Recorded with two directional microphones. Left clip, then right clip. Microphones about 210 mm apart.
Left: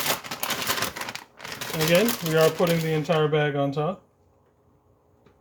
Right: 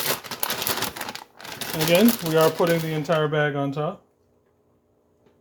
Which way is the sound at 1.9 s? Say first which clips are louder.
Right 3 dB; 35° right (ahead or behind).